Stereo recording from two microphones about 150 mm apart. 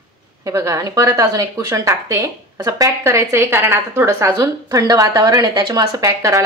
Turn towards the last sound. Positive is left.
turn(degrees=-20)  # may be behind; listen again after turning